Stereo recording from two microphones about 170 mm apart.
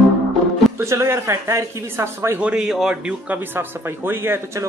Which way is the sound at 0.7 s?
15° right (ahead or behind).